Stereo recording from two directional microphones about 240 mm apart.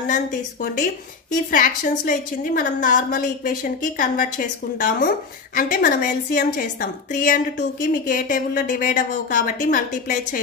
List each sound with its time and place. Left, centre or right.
0.0 s a woman's voice: left